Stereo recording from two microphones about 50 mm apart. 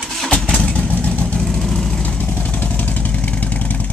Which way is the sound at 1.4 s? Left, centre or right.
Centre.